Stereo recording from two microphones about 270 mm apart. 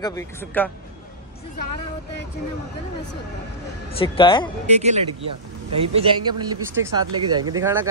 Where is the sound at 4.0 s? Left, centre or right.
Centre.